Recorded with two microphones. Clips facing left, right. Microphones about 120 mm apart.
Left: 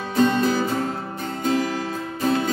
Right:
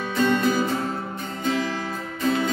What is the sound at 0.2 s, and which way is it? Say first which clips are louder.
Music: left 3 dB; 35° left (ahead or behind).